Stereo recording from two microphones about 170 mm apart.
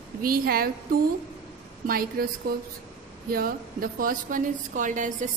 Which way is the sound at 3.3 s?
60° right (ahead or behind).